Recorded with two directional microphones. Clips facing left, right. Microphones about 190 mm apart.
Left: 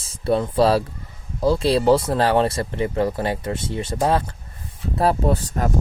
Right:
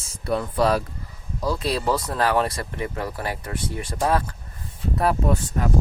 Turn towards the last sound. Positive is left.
turn(degrees=40)  # may be behind; listen again after turning